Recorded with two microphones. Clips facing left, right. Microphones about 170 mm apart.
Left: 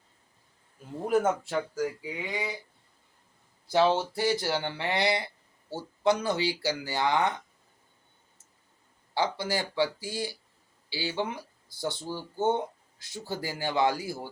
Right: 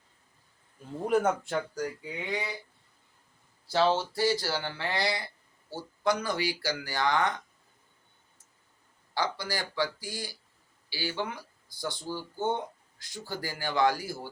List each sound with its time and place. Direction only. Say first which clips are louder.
1.0 s speech: left 1 dB; centre (ahead or behind)
3.7 s speech: left 2 dB; 15° left (ahead or behind)
9.1 s speech: left 3 dB; 25° left (ahead or behind)